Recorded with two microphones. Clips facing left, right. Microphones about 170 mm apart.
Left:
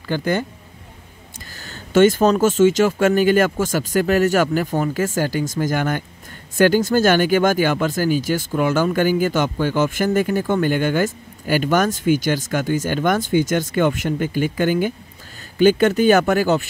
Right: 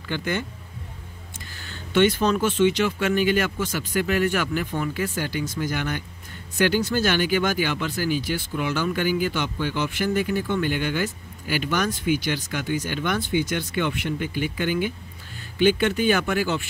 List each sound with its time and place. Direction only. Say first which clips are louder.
0.1 s speech: left 6 dB; 40° left (ahead or behind)
1.6 s speech: left 6 dB; 45° left (ahead or behind)